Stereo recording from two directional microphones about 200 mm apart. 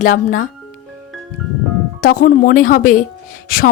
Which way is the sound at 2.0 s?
45° left (ahead or behind).